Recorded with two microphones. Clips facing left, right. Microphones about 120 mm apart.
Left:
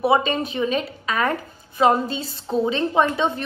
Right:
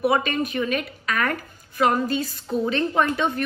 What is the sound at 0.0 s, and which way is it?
A woman's voice, 20° left (ahead or behind).